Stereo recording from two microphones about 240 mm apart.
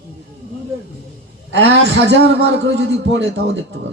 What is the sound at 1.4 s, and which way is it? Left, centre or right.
Speech, right.